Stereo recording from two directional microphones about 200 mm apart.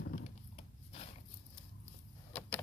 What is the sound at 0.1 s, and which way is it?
Dog, 35° left (ahead or behind).